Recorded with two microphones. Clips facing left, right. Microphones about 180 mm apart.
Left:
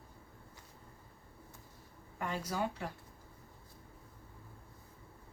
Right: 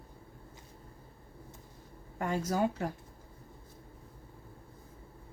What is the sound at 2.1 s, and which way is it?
Speech, 45° right (ahead or behind).